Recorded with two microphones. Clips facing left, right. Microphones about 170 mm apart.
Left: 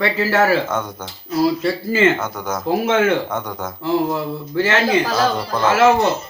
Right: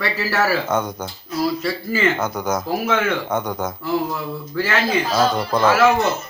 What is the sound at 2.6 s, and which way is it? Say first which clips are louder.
Speech: left 8 dB; 25° left (ahead or behind).